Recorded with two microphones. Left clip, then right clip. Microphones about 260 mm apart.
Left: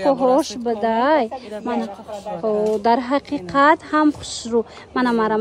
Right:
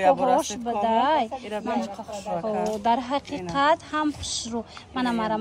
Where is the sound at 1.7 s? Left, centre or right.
Left.